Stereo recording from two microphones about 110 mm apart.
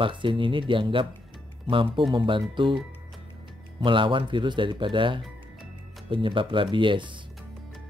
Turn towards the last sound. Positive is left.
turn(degrees=-50)  # may be behind; listen again after turning